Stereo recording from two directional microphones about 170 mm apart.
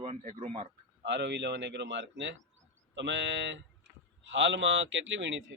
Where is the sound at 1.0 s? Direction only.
90° right.